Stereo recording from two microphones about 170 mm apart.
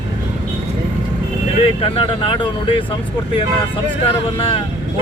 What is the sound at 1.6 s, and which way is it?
Speech, 35° left (ahead or behind).